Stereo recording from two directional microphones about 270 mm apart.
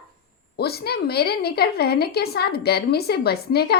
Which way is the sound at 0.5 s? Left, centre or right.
Left.